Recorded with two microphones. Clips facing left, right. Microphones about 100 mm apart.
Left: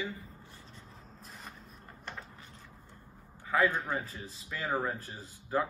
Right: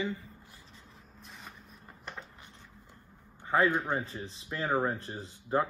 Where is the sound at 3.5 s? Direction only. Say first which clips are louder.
Right 2 dB; 25° right (ahead or behind).